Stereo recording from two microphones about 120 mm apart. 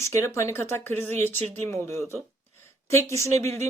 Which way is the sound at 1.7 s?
20° left (ahead or behind).